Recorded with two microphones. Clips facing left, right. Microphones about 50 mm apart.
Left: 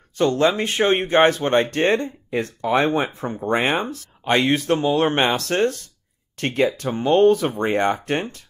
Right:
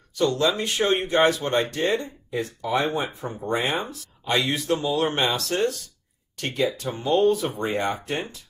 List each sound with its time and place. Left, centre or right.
0.1 s speech: left